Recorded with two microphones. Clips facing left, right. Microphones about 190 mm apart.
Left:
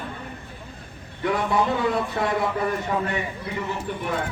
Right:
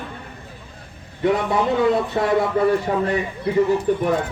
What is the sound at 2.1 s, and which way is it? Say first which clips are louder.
Speech: right 4 dB; 25° right (ahead or behind).